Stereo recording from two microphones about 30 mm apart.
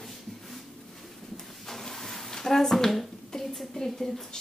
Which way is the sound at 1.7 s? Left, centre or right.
Centre.